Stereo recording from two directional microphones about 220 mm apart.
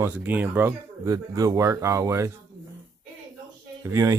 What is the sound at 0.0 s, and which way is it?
Speech, 10° right (ahead or behind).